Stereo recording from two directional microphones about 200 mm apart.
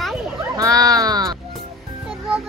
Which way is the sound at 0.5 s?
15° right (ahead or behind).